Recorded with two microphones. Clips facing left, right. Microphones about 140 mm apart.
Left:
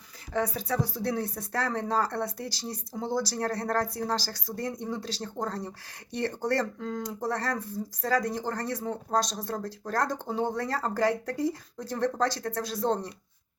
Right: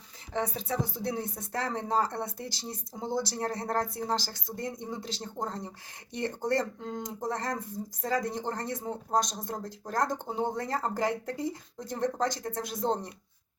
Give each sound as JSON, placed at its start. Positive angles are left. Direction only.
{"t": 0.3, "sound": "speech", "side_deg": -25}